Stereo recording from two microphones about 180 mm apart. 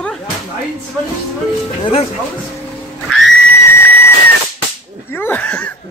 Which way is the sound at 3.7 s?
10° left (ahead or behind).